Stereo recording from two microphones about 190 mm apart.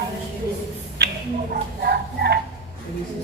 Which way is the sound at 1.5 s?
55° right (ahead or behind).